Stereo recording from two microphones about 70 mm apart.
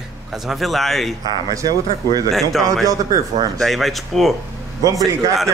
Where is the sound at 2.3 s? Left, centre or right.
Centre.